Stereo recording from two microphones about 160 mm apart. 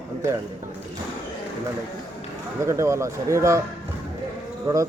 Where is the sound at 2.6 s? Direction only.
20° right (ahead or behind).